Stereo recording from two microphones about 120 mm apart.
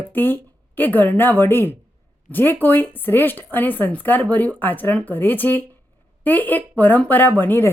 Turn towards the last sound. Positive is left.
turn(degrees=15)  # may be behind; listen again after turning